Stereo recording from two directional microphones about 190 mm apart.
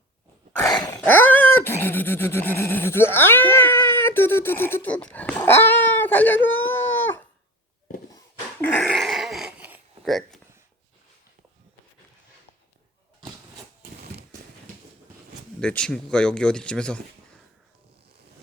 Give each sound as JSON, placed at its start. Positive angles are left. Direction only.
{"t": 0.6, "sound": "dog", "side_deg": 20}
{"t": 8.6, "sound": "a sound", "side_deg": 5}
{"t": 15.6, "sound": "speech", "side_deg": 5}